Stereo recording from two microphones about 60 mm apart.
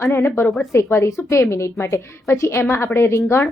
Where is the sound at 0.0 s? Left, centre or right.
Left.